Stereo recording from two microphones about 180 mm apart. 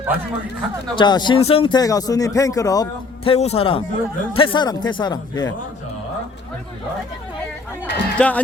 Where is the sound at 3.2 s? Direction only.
35° left (ahead or behind).